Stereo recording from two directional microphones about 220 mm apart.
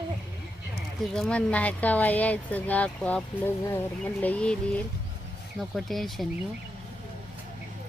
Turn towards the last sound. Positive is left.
turn(degrees=0)  # may be behind; listen again after turning